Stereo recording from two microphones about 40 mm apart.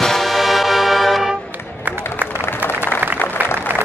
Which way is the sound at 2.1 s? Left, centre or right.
Right.